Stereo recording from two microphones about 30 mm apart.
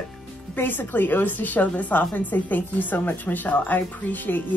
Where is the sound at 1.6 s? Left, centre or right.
Left.